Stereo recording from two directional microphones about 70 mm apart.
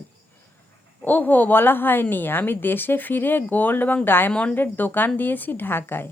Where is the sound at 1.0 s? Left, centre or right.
Left.